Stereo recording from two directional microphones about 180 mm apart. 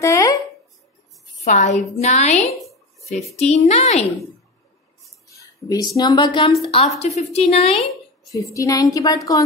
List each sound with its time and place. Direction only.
0.0 s a sound: 20° left (ahead or behind)
1.4 s a woman's voice: 40° left (ahead or behind)
5.3 s a woman's voice: 20° left (ahead or behind)
8.3 s speech: 20° left (ahead or behind)